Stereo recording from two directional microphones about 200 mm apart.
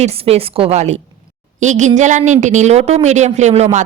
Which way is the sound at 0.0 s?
30° right (ahead or behind).